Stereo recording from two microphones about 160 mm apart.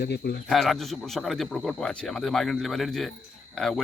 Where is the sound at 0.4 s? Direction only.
Centre (ahead or behind).